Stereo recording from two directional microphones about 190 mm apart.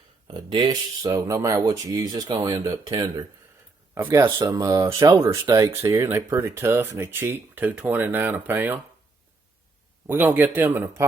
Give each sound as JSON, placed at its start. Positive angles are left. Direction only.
{"t": 0.3, "sound": "speech", "side_deg": -25}
{"t": 10.1, "sound": "speech", "side_deg": -10}